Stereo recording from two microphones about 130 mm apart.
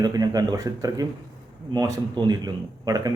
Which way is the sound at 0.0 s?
30° right (ahead or behind).